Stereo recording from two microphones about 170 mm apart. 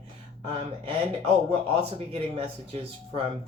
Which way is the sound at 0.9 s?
35° right (ahead or behind).